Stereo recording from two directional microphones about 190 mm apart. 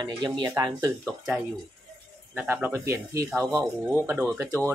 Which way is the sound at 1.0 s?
Centre (ahead or behind).